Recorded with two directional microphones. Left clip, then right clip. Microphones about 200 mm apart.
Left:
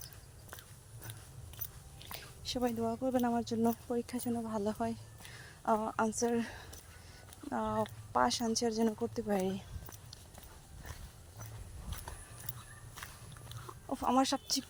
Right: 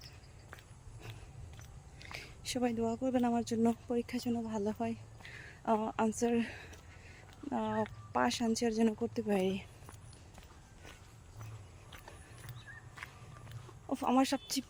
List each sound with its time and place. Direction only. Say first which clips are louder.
2.0 s speech: right 1 dB; 15° right (ahead or behind)
13.9 s speech: even; 20° right (ahead or behind)